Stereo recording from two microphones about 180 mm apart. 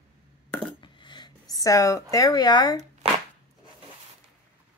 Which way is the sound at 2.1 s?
20° left (ahead or behind).